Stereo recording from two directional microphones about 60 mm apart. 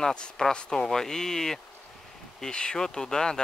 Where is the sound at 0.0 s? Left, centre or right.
Centre.